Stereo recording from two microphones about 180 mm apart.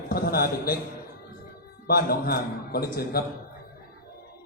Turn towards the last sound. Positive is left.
turn(degrees=55)  # may be behind; listen again after turning